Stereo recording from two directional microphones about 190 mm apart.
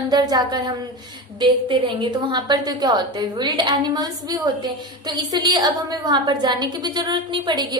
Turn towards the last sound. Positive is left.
turn(degrees=-20)  # may be behind; listen again after turning